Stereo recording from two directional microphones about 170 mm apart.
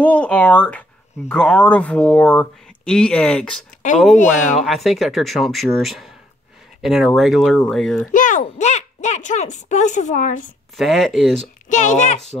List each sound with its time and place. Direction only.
0.0 s speech: 10° left (ahead or behind)
4.1 s speech: 45° left (ahead or behind)
4.6 s speech: centre (ahead or behind)
8.1 s speech: 50° left (ahead or behind)
10.8 s speech: centre (ahead or behind)
11.7 s speech: 45° left (ahead or behind)